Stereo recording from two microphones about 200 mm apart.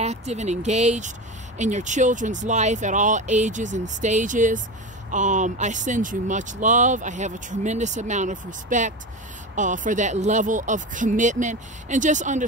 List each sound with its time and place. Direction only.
0.0 s speech: 35° right (ahead or behind)